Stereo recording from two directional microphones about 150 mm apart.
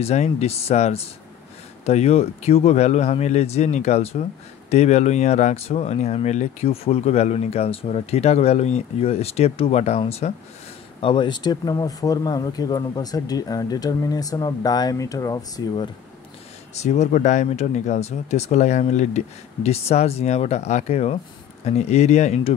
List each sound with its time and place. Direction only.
0.0 s speech: 45° left (ahead or behind); by 15.9 s 30° left (ahead or behind)
16.7 s speech: 50° left (ahead or behind)